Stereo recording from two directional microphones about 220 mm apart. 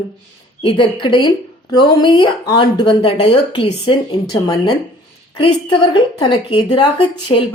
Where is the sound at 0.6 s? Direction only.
25° left (ahead or behind).